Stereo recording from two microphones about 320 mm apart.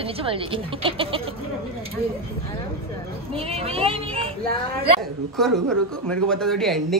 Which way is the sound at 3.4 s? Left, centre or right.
Centre.